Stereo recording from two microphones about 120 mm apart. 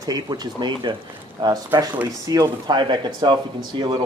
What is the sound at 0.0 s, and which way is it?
Speech, 35° right (ahead or behind).